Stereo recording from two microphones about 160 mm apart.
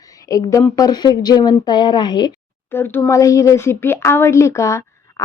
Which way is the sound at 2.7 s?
15° left (ahead or behind).